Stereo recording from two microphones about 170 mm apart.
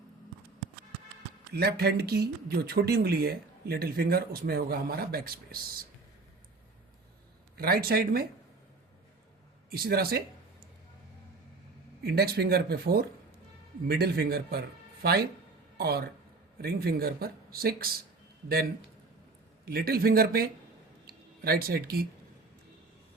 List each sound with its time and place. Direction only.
1.5 s speech: 70° right (ahead or behind)
7.5 s speech: 65° right (ahead or behind)
9.7 s speech: 65° right (ahead or behind)
12.0 s speech: 70° right (ahead or behind)
19.6 s speech: 65° right (ahead or behind)
21.1 s a sound: 60° right (ahead or behind)